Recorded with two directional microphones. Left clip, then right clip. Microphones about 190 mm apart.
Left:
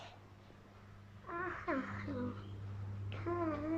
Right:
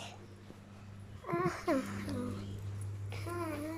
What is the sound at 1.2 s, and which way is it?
Babbling, 25° right (ahead or behind).